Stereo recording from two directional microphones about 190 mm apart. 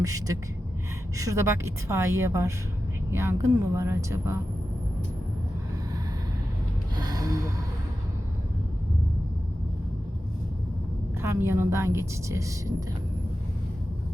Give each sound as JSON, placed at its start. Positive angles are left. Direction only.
{"t": 0.0, "sound": "a woman's voice", "side_deg": -20}
{"t": 6.9, "sound": "gasp", "side_deg": -20}
{"t": 11.2, "sound": "a woman's voice", "side_deg": -15}